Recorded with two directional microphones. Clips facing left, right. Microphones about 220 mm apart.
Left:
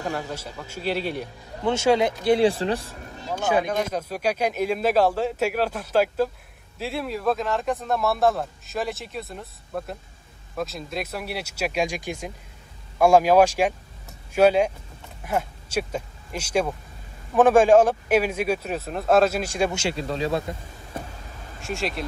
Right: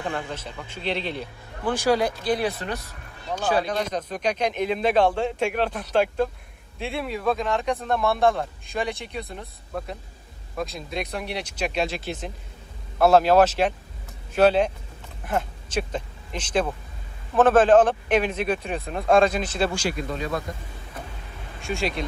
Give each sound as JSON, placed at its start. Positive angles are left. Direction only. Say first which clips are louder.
{"t": 0.1, "sound": "a man's voice", "louder": "left 1 dB", "side_deg": 5}
{"t": 1.6, "sound": "speech", "louder": "left 2 dB", "side_deg": 25}
{"t": 3.4, "sound": "a man's voice", "louder": "left 1 dB", "side_deg": 10}
{"t": 19.7, "sound": "speech", "louder": "left 1 dB", "side_deg": 25}
{"t": 21.5, "sound": "speech", "louder": "right 1 dB", "side_deg": 0}